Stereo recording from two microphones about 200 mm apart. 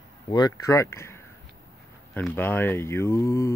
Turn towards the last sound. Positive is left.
turn(degrees=15)  # may be behind; listen again after turning